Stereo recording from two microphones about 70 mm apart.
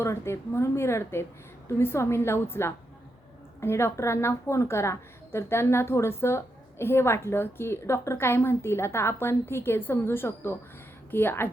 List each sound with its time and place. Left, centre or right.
0.0 s a woman's voice: left